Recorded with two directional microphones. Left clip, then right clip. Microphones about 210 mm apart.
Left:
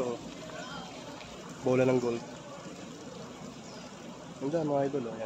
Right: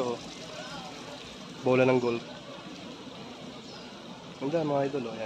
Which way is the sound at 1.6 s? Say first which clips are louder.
Right 3 dB; 20° right (ahead or behind).